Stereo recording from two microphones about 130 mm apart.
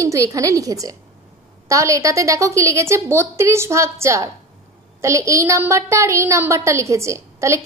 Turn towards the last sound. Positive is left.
turn(degrees=-20)  # may be behind; listen again after turning